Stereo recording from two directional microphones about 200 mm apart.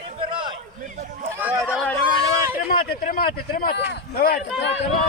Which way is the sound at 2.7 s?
45° left (ahead or behind).